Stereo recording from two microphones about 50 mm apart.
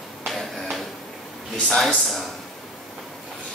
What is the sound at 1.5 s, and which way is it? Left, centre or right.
Speech, centre.